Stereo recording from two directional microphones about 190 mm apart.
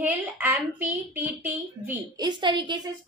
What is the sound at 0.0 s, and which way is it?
A woman's voice, 10° right (ahead or behind).